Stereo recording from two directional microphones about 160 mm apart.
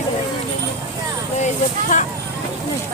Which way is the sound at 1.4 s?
50° left (ahead or behind).